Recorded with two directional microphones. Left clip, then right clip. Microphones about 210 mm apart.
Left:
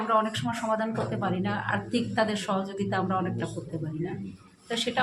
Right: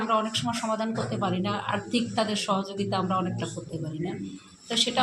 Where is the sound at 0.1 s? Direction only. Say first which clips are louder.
Left 1 dB; centre (ahead or behind).